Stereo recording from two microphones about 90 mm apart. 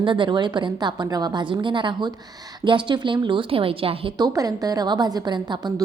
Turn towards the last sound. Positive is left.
turn(degrees=-55)  # may be behind; listen again after turning